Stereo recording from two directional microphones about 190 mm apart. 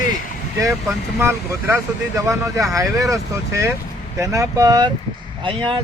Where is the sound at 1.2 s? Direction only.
15° right (ahead or behind).